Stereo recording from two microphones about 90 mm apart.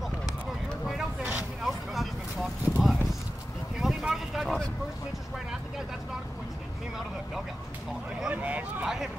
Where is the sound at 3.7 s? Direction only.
5° right (ahead or behind).